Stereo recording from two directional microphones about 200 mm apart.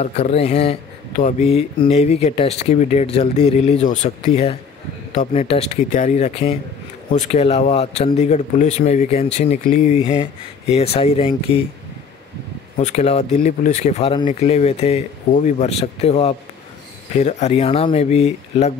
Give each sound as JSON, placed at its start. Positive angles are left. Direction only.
{"t": 0.0, "sound": "speech", "side_deg": 30}
{"t": 12.7, "sound": "speech", "side_deg": 35}